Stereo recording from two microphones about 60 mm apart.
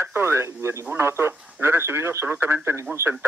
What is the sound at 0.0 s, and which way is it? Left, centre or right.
Speech, right.